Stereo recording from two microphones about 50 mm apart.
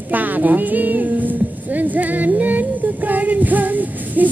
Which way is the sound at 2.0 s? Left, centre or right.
Right.